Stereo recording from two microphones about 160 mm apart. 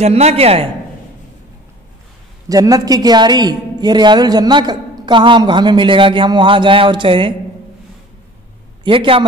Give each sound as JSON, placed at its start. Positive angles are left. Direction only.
{"t": 0.0, "sound": "a man's voice", "side_deg": -40}
{"t": 2.4, "sound": "a woman's voice", "side_deg": -20}
{"t": 8.8, "sound": "a man's voice", "side_deg": -35}